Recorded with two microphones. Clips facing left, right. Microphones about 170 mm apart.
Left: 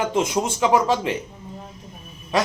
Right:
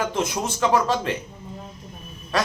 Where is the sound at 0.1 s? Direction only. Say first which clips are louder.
Left 4 dB; 20° left (ahead or behind).